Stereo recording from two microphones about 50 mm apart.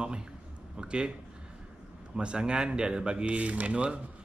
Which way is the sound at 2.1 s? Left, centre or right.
Centre.